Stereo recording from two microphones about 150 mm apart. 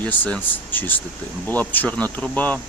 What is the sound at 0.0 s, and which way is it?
Speech, 10° left (ahead or behind).